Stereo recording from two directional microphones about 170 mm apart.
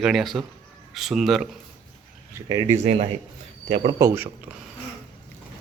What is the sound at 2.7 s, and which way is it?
Speech, 40° right (ahead or behind).